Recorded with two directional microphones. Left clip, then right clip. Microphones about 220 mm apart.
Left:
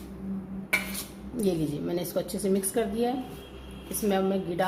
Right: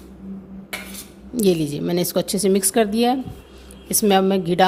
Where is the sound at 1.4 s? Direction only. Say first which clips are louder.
Right 9 dB; 45° right (ahead or behind).